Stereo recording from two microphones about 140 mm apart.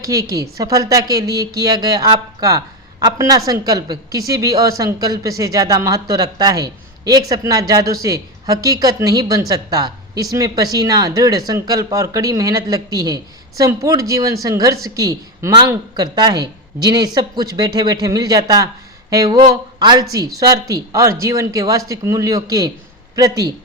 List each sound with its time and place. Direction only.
0.0 s speech: 25° right (ahead or behind)